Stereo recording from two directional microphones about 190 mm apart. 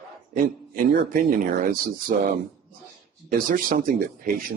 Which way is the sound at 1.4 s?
50° right (ahead or behind).